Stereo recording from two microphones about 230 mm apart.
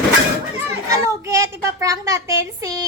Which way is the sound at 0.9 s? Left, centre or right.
Centre.